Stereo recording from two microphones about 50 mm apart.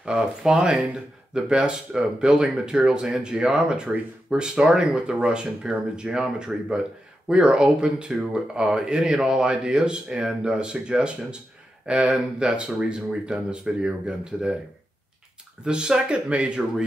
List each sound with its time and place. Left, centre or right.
0.0 s speech: centre
15.6 s speech: centre